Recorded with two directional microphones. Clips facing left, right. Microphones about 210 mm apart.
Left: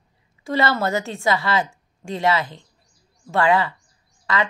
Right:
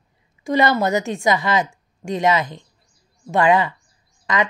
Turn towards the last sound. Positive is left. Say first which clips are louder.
# right 2 dB
turn(degrees=-15)  # may be behind; listen again after turning